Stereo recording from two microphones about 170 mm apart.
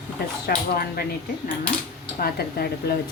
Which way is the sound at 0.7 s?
65° left (ahead or behind).